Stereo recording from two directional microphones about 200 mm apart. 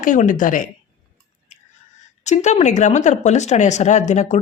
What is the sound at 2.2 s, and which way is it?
Speech, 35° left (ahead or behind).